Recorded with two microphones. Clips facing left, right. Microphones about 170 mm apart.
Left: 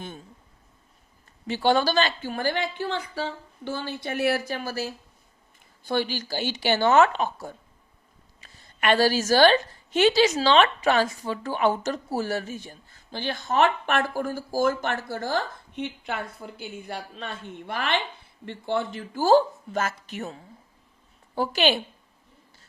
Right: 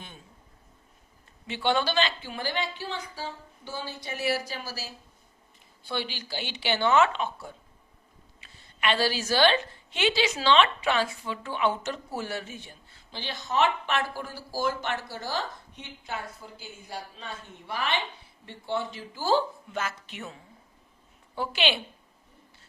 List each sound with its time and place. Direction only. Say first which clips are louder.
1.5 s a woman's voice: left 5 dB; 40° left (ahead or behind); by 4.9 s 55° left (ahead or behind)
5.8 s a woman's voice: left 7 dB; 45° left (ahead or behind)